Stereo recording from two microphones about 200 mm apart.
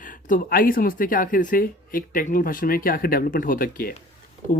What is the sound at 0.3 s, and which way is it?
Speech, 45° left (ahead or behind).